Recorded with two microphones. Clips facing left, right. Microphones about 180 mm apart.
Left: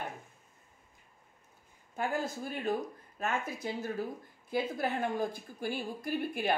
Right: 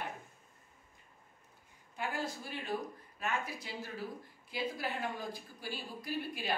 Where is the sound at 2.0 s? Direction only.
45° left (ahead or behind).